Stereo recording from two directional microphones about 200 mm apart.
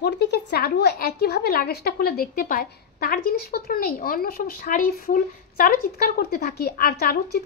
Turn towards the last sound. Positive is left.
turn(degrees=50)  # may be behind; listen again after turning